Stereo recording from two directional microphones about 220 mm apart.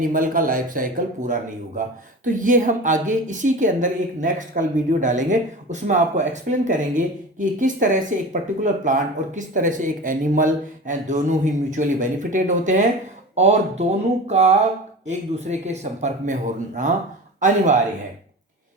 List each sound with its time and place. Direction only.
0.0 s a woman's voice: 40° right (ahead or behind)